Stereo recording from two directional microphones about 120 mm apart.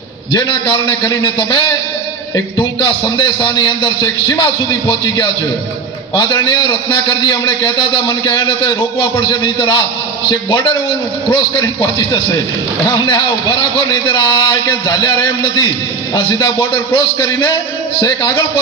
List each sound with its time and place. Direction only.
0.3 s a man's voice: 40° left (ahead or behind)